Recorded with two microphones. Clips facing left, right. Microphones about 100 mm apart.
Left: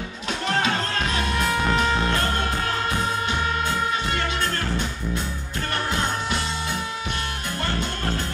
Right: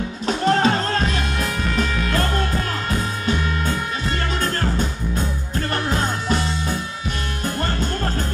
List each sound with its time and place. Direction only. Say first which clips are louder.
0.3 s music: right 6 dB; 35° right (ahead or behind)
1.7 s music: left 1 dB; 30° left (ahead or behind)